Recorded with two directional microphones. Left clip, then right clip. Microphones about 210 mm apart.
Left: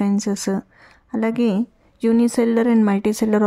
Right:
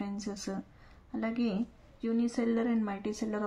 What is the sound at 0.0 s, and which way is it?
A woman's voice, 50° left (ahead or behind).